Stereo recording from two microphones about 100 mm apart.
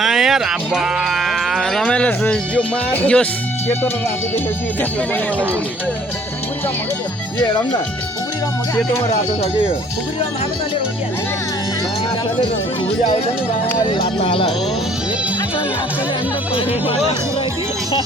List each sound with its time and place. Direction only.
0.0 s speech: 5° right (ahead or behind); by 3.2 s 15° left (ahead or behind)
13.9 s speech: 65° left (ahead or behind)
16.6 s speech: 70° left (ahead or behind)